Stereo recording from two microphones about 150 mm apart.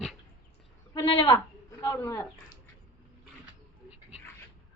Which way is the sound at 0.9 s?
35° left (ahead or behind).